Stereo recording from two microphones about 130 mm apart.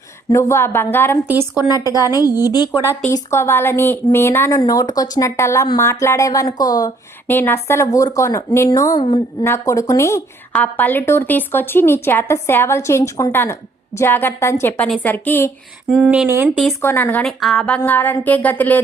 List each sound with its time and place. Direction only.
0.3 s speech: 25° left (ahead or behind)
1.3 s speech: 15° right (ahead or behind)
1.8 s speech: 25° left (ahead or behind)
7.3 s speech: 15° left (ahead or behind)
9.0 s a woman's voice: 40° left (ahead or behind)
9.4 s speech: 25° left (ahead or behind)
10.5 s a woman's voice: 10° left (ahead or behind)
15.9 s speech: 10° right (ahead or behind)
16.8 s a woman's voice: 15° left (ahead or behind)
17.4 s a woman's voice: centre (ahead or behind)
17.7 s a woman's voice: 15° left (ahead or behind)